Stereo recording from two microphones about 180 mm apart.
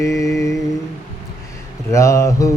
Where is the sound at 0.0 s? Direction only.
15° left (ahead or behind).